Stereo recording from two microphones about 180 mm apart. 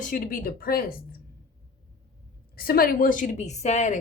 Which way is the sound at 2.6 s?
55° left (ahead or behind).